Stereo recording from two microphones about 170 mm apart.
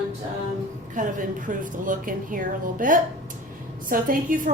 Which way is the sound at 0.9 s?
50° right (ahead or behind).